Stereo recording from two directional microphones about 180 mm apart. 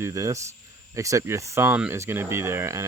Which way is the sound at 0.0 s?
15° right (ahead or behind).